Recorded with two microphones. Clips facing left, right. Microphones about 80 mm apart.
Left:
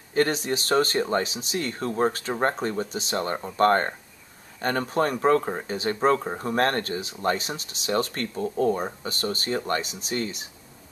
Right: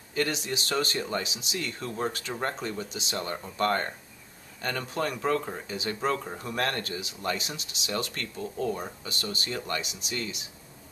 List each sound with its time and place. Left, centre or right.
0.1 s speech: left